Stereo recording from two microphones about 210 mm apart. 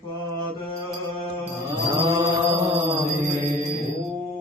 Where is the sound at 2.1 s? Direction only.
30° right (ahead or behind).